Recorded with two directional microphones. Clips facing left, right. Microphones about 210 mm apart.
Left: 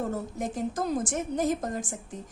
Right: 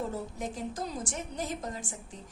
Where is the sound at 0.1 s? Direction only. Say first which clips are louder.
Left 4 dB; 45° left (ahead or behind).